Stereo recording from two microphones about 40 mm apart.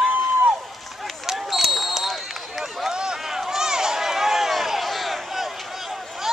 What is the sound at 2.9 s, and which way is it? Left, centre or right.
Run, centre.